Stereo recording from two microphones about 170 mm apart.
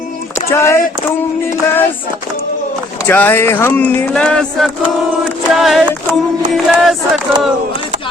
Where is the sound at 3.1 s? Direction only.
10° left (ahead or behind).